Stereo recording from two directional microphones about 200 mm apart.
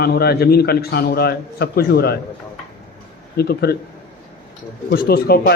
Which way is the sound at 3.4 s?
50° left (ahead or behind).